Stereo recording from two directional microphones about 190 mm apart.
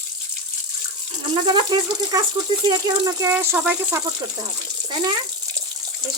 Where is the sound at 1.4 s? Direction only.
20° right (ahead or behind).